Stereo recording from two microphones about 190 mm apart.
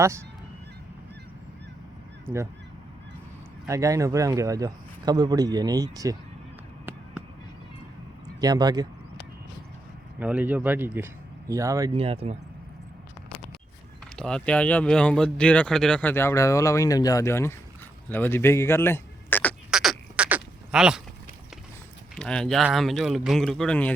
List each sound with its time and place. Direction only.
2.2 s speech: 15° right (ahead or behind)
3.7 s speech: 15° right (ahead or behind)
8.4 s speech: 20° right (ahead or behind)
10.2 s speech: 10° right (ahead or behind)
11.9 s speech: 30° right (ahead or behind)
14.2 s speech: 5° left (ahead or behind)
19.7 s a sound: centre (ahead or behind)
22.2 s speech: 5° left (ahead or behind)